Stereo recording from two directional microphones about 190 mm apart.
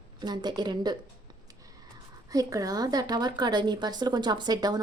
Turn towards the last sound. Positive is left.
turn(degrees=-20)  # may be behind; listen again after turning